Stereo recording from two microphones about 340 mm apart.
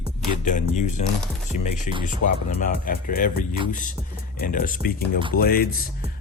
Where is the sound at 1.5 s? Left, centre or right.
Left.